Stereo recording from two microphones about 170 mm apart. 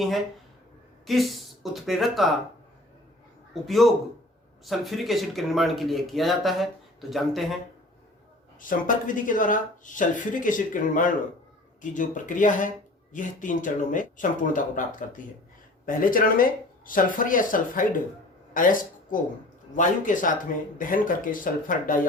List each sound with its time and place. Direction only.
1.0 s speech: centre (ahead or behind)
3.5 s speech: centre (ahead or behind)
8.6 s speech: 50° left (ahead or behind)